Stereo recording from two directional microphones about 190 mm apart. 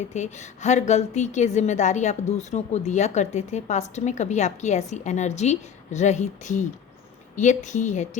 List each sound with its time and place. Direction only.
0.1 s a woman's voice: 40° left (ahead or behind)